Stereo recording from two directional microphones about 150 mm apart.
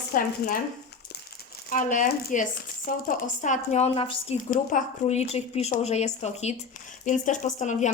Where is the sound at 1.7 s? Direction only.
60° left (ahead or behind).